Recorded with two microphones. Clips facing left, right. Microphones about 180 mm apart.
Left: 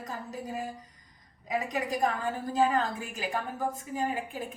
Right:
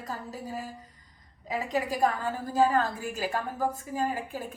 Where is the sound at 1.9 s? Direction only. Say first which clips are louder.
Even; 20° left (ahead or behind).